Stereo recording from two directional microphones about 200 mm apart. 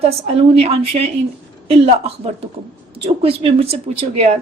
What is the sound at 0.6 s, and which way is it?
A woman's voice, 30° right (ahead or behind).